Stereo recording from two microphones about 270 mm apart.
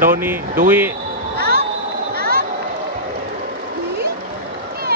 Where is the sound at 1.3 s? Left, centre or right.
Right.